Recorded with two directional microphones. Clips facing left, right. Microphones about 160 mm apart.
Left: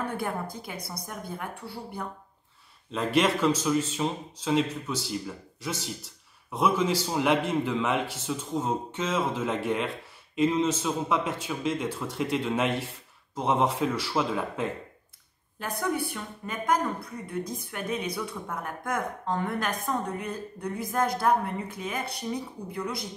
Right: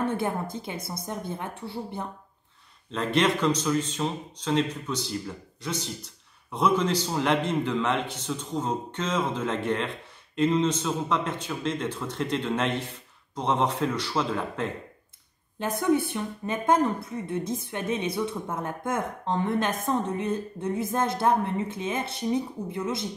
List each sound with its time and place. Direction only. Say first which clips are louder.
0.0 s a woman's voice: right 4 dB; 25° right (ahead or behind)
2.9 s a man's voice: even; 5° left (ahead or behind)
15.6 s a woman's voice: right 6 dB; 25° right (ahead or behind)